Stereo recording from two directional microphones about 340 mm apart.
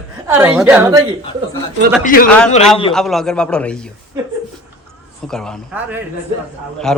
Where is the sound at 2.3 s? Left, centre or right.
Centre.